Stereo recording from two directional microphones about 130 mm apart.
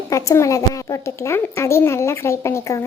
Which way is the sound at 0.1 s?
25° left (ahead or behind).